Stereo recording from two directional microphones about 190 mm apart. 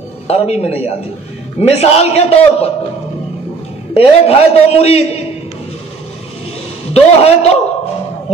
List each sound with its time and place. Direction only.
0.3 s a man's voice: 35° left (ahead or behind)
3.9 s a man's voice: 30° left (ahead or behind)
6.9 s a man's voice: 30° left (ahead or behind)